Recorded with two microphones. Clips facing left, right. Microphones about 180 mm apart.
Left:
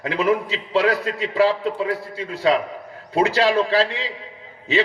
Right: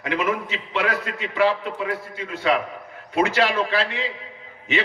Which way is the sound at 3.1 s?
35° left (ahead or behind).